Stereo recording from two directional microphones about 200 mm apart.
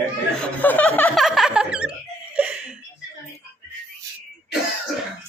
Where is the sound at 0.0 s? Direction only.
5° left (ahead or behind).